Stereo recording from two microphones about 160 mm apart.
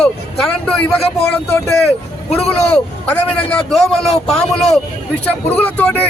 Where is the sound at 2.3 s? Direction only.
5° left (ahead or behind).